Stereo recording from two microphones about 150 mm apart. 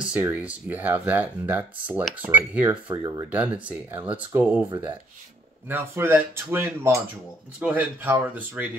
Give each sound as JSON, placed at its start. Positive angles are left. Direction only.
{"t": 0.0, "sound": "speech", "side_deg": -10}
{"t": 2.7, "sound": "speech", "side_deg": -30}
{"t": 3.3, "sound": "speech", "side_deg": -10}
{"t": 5.7, "sound": "speech", "side_deg": -15}